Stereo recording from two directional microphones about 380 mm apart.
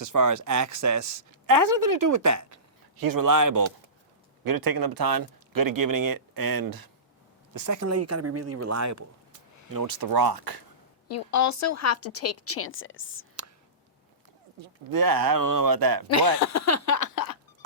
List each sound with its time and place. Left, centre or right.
0.0 s a woman's voice: right
3.0 s speech: right
7.5 s speech: right
9.7 s speech: right
11.1 s a woman's voice: left
14.6 s speech: right
16.4 s a sound: left